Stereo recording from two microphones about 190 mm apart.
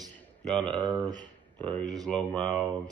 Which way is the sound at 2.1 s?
5° left (ahead or behind).